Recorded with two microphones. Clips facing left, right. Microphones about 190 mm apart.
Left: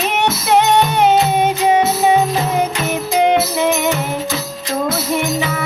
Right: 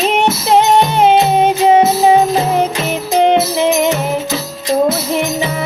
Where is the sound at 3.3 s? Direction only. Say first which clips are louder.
Right 3 dB; 25° right (ahead or behind).